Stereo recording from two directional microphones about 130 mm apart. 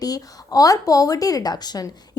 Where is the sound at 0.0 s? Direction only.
30° left (ahead or behind).